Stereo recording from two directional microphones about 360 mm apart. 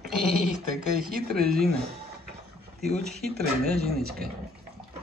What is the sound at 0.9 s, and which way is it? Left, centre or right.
Speech, right.